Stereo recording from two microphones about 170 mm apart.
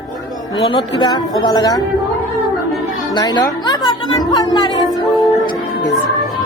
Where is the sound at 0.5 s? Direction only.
30° left (ahead or behind).